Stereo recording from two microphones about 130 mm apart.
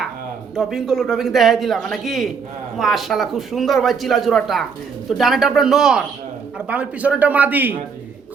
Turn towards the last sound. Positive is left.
turn(degrees=-15)  # may be behind; listen again after turning